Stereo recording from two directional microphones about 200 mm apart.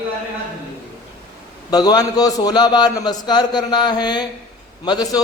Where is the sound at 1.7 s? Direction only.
20° left (ahead or behind).